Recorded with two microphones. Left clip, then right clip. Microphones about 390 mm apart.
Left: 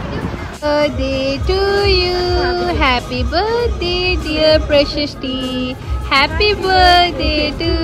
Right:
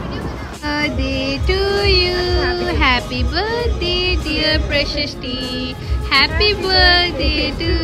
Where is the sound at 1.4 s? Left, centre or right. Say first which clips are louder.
Left 2 dB; centre.